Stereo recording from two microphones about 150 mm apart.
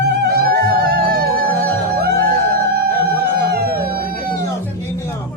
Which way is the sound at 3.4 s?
90° right.